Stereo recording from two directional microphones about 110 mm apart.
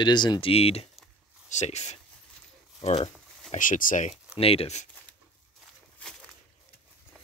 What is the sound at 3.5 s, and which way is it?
Speech, 90° left.